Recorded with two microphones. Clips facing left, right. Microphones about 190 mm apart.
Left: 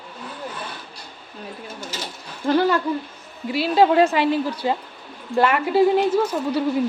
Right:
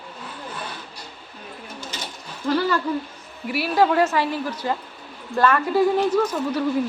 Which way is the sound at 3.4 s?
20° left (ahead or behind).